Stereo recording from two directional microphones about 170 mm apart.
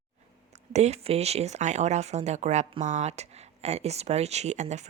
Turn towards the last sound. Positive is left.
turn(degrees=-40)  # may be behind; listen again after turning